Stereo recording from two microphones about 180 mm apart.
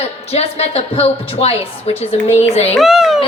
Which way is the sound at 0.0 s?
35° left (ahead or behind).